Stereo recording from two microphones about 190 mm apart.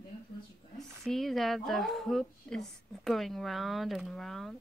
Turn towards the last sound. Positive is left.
turn(degrees=0)  # may be behind; listen again after turning